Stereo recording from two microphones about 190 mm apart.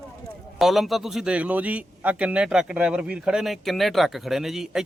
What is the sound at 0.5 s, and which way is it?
A man's voice, centre (ahead or behind).